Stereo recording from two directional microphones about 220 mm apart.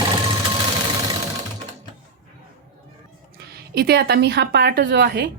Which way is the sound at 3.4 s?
45° right (ahead or behind).